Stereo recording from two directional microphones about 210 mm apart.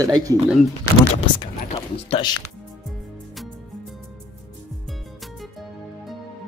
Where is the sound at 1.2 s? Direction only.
25° left (ahead or behind).